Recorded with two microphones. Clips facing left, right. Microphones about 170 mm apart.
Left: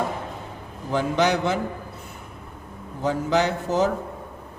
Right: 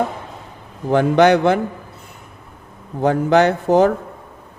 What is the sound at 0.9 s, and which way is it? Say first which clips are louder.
Speech: right 9 dB; 60° right (ahead or behind).